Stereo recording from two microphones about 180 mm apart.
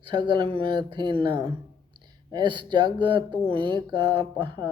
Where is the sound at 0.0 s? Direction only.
25° right (ahead or behind).